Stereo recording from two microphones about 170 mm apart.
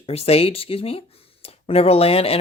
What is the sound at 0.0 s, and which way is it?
Speech, 35° left (ahead or behind).